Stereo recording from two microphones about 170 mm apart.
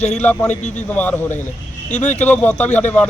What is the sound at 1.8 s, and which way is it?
Speech, 45° left (ahead or behind).